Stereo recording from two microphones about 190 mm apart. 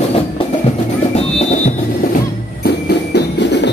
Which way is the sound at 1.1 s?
35° left (ahead or behind).